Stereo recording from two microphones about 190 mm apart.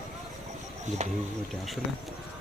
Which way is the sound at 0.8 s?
35° right (ahead or behind).